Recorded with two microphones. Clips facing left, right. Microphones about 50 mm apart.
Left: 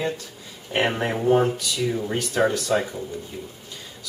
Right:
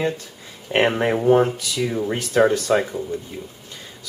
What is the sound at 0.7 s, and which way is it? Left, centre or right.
Speech, centre.